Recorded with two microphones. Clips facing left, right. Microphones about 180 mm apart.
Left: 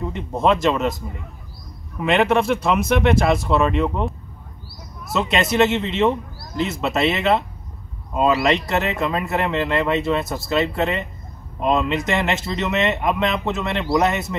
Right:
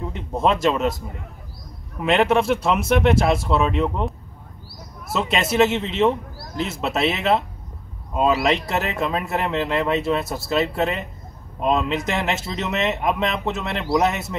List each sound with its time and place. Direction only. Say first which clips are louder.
0.0 s speech: left 1 dB; centre (ahead or behind)
2.0 s speech: even; centre (ahead or behind)
5.1 s speech: left 1 dB; 5° right (ahead or behind)